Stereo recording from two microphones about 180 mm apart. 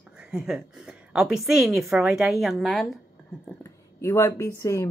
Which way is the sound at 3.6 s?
15° left (ahead or behind).